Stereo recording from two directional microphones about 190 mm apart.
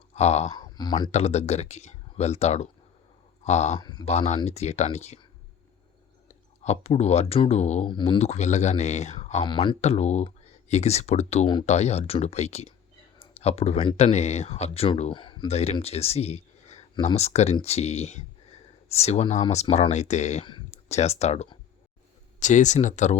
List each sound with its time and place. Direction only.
0.1 s speech: 35° left (ahead or behind)
0.5 s speech: 20° left (ahead or behind)
1.1 s speech: 35° left (ahead or behind)
3.8 s speech: 20° left (ahead or behind)
4.1 s speech: 35° left (ahead or behind)
6.7 s speech: 35° left (ahead or behind)
8.2 s speech: 35° left (ahead or behind)
20.4 s speech: 25° left (ahead or behind)